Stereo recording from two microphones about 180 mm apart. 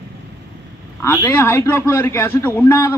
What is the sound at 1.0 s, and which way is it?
A man's voice, 10° left (ahead or behind).